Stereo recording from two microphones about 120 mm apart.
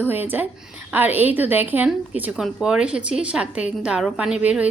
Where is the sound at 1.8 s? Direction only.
5° right (ahead or behind).